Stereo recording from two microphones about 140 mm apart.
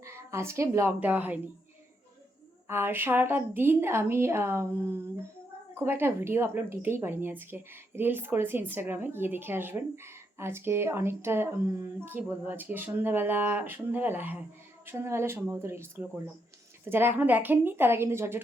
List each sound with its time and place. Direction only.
0.0 s a woman's voice: 20° right (ahead or behind)
2.6 s speech: 15° right (ahead or behind)